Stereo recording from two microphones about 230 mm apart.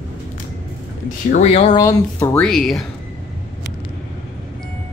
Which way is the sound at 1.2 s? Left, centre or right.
Left.